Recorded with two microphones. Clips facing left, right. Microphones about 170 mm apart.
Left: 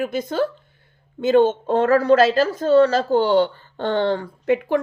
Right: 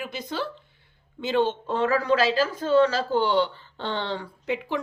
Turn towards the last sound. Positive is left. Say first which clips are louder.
# left 9 dB
turn(degrees=50)  # may be behind; listen again after turning